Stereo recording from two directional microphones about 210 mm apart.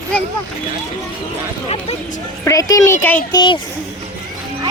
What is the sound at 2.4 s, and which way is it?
Speech, 15° left (ahead or behind).